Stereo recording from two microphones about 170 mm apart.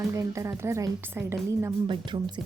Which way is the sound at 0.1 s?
20° right (ahead or behind).